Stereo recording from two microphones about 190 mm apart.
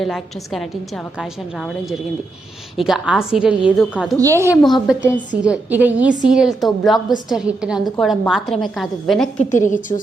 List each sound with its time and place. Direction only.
0.0 s a woman's voice: centre (ahead or behind)
4.2 s a woman's voice: 15° right (ahead or behind)
4.6 s a woman's voice: centre (ahead or behind)
9.5 s a woman's voice: 40° left (ahead or behind)